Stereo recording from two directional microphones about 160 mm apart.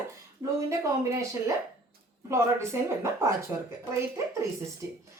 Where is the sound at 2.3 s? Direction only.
15° right (ahead or behind).